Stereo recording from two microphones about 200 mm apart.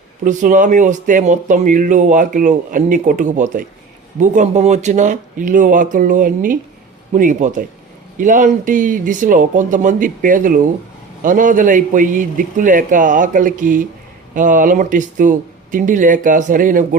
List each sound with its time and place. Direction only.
0.3 s speech: 40° right (ahead or behind)